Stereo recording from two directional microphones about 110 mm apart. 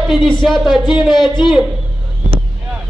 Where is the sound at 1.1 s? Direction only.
45° left (ahead or behind).